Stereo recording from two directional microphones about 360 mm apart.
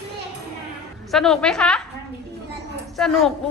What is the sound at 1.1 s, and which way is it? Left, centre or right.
Speech, centre.